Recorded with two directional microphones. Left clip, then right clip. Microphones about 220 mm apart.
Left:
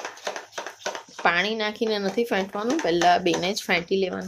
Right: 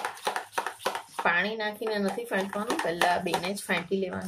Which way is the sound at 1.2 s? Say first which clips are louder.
Left 4 dB; 45° left (ahead or behind).